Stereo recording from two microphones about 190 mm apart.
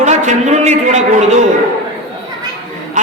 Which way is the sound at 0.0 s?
40° right (ahead or behind).